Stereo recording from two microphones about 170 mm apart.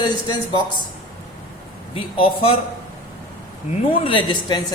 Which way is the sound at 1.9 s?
30° left (ahead or behind).